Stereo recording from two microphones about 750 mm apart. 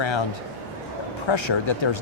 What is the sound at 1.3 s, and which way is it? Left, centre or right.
Speech, left.